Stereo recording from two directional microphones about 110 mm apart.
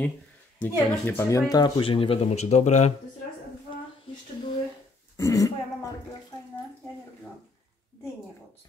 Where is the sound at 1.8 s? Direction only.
55° left (ahead or behind); by 2.9 s 90° left.